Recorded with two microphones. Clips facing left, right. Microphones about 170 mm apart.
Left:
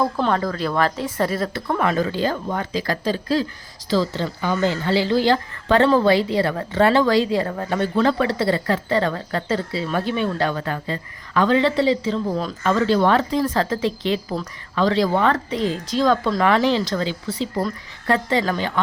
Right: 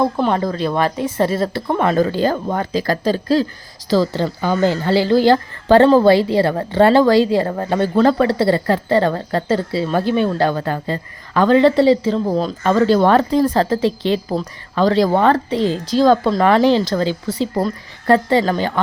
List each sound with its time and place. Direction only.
0.2 s a woman's voice: 20° right (ahead or behind)
2.0 s a woman's voice: 40° right (ahead or behind)